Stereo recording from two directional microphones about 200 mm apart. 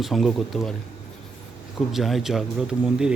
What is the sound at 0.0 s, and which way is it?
Speech, centre (ahead or behind).